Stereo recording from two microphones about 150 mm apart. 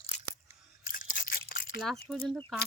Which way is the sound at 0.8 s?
60° left (ahead or behind).